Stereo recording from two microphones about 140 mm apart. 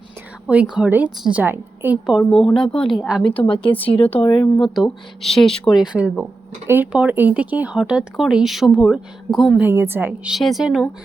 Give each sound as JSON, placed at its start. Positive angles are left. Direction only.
{"t": 0.4, "sound": "a woman's voice", "side_deg": -10}
{"t": 2.4, "sound": "speech", "side_deg": 5}
{"t": 3.2, "sound": "a woman's voice", "side_deg": 35}
{"t": 3.6, "sound": "speech", "side_deg": 10}
{"t": 3.9, "sound": "speech", "side_deg": 45}
{"t": 4.3, "sound": "speech", "side_deg": 30}
{"t": 4.6, "sound": "speech", "side_deg": 0}
{"t": 9.6, "sound": "a woman's voice", "side_deg": -15}
{"t": 10.3, "sound": "speech", "side_deg": 0}